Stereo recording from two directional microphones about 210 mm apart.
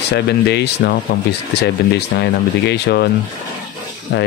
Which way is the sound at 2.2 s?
55° left (ahead or behind).